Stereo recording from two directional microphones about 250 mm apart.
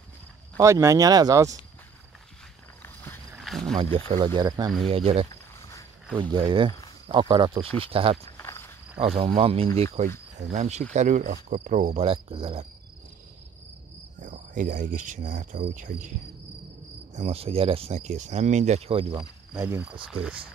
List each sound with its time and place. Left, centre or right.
0.6 s speech: centre
2.8 s a sound: centre
3.7 s speech: right
5.3 s a sound: centre
6.3 s speech: centre
8.3 s walk: centre
9.0 s speech: right
14.2 s cricket: right
17.1 s speech: right; by 20.3 s centre